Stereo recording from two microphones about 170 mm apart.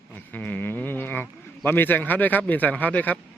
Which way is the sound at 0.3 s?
10° left (ahead or behind).